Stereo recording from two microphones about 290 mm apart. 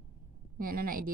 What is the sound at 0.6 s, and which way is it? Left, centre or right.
Speech, right.